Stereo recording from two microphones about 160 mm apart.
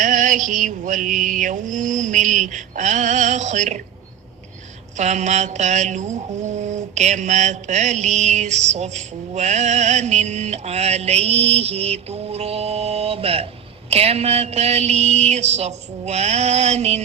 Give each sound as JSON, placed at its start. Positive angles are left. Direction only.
{"t": 0.0, "sound": "mantra", "side_deg": -55}
{"t": 4.9, "sound": "mantra", "side_deg": -45}